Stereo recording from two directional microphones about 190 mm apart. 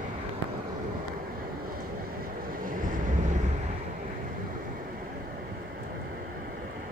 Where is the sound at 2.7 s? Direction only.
45° right (ahead or behind).